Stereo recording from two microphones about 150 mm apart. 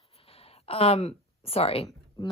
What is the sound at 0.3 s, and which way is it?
Speech, 40° left (ahead or behind).